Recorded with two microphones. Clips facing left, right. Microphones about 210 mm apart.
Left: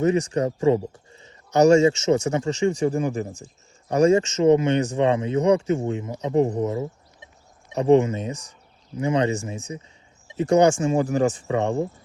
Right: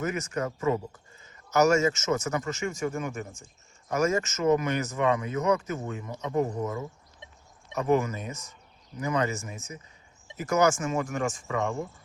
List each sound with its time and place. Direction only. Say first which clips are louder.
0.0 s speech: left 9 dB; 30° left (ahead or behind)